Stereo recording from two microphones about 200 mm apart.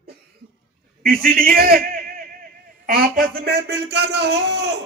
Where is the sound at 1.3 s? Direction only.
45° right (ahead or behind).